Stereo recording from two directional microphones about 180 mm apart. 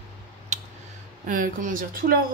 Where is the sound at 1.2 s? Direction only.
45° right (ahead or behind).